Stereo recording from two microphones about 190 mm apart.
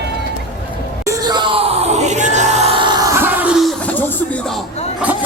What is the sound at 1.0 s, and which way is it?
Crowd, 20° right (ahead or behind).